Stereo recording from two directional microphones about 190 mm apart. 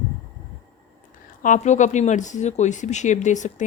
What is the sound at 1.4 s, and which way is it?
Speech, 40° left (ahead or behind).